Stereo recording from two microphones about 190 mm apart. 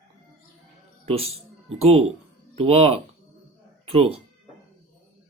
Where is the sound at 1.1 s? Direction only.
30° right (ahead or behind).